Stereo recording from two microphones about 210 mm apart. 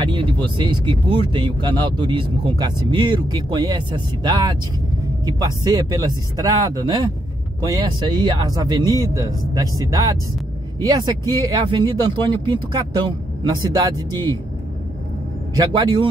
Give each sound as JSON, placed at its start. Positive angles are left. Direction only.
{"t": 0.0, "sound": "speech", "side_deg": -20}
{"t": 15.5, "sound": "speech", "side_deg": -20}